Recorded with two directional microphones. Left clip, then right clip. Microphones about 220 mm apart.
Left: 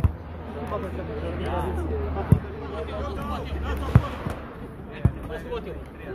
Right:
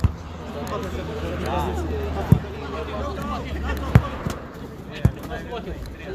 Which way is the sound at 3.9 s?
45° right (ahead or behind).